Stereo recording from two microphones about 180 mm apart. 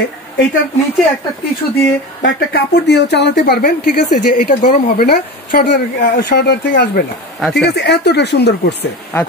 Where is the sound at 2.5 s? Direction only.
70° left (ahead or behind).